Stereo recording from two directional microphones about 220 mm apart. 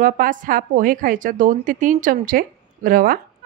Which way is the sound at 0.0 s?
35° right (ahead or behind).